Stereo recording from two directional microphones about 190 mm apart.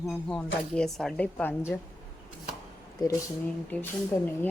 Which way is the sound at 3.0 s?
15° left (ahead or behind).